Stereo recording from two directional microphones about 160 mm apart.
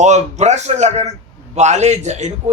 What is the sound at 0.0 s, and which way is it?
A man's voice, 45° right (ahead or behind).